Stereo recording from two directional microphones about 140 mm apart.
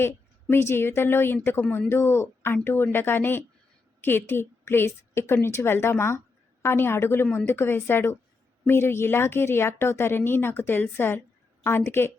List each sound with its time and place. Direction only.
0.0 s a woman's voice: 15° left (ahead or behind)